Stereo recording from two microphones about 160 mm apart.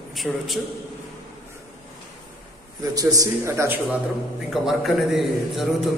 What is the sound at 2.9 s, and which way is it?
Speech, 20° right (ahead or behind).